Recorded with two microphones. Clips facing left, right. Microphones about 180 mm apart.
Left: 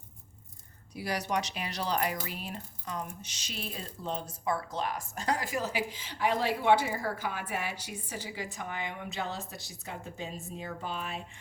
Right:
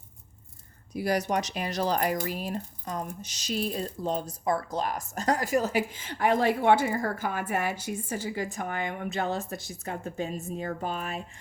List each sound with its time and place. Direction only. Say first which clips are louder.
0.9 s speech: right 5 dB; 45° right (ahead or behind)